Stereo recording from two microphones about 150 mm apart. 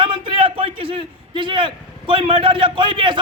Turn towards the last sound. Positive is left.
turn(degrees=-35)  # may be behind; listen again after turning